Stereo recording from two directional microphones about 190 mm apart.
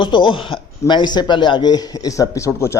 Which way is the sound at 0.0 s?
25° left (ahead or behind).